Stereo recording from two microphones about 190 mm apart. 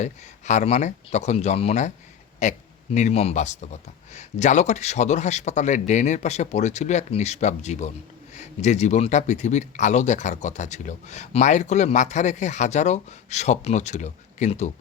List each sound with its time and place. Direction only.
0.0 s speech: 40° left (ahead or behind)